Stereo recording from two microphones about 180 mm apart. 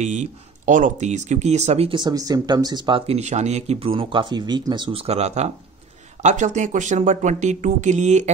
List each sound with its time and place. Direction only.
0.0 s speech: 40° right (ahead or behind)